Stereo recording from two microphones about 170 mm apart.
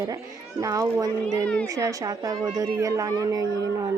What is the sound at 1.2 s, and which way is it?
Speech, 5° left (ahead or behind).